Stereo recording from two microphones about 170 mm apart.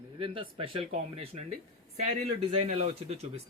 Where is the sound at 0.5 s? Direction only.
30° right (ahead or behind).